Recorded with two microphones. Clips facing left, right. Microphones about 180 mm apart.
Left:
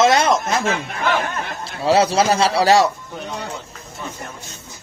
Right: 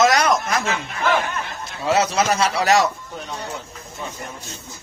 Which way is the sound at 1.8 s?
30° left (ahead or behind).